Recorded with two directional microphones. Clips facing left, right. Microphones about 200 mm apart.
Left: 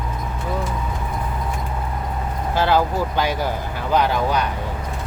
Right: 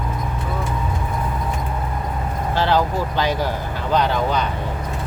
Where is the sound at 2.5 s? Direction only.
10° left (ahead or behind).